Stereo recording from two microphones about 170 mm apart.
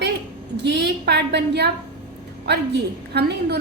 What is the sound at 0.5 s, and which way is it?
A woman's voice, 90° right.